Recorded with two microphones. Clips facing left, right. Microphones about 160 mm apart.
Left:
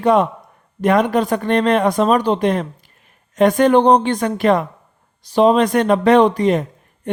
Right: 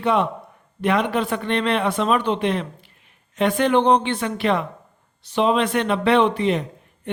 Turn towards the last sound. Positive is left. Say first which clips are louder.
# left 5 dB
turn(degrees=45)  # may be behind; listen again after turning